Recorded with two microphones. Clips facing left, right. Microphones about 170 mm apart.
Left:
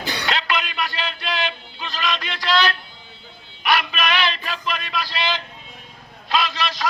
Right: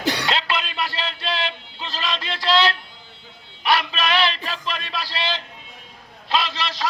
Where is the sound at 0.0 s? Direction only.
90° right.